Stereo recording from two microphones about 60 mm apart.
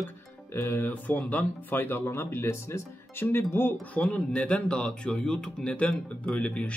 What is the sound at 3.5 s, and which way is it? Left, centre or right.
Speech, left.